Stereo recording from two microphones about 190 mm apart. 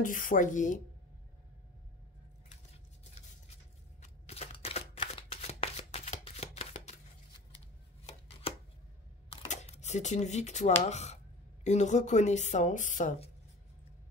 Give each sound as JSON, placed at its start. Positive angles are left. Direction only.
{"t": 0.0, "sound": "speech", "side_deg": 45}
{"t": 2.5, "sound": "a sound", "side_deg": 35}
{"t": 4.0, "sound": "shuffling cards", "side_deg": 35}
{"t": 8.1, "sound": "chopping", "side_deg": 30}
{"t": 9.3, "sound": "a sound", "side_deg": 35}
{"t": 10.8, "sound": "speech", "side_deg": 35}